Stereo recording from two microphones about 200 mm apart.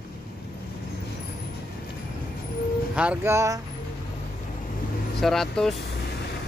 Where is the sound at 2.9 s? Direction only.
5° right (ahead or behind).